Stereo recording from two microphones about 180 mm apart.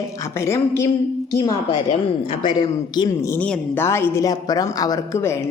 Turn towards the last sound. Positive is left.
turn(degrees=15)  # may be behind; listen again after turning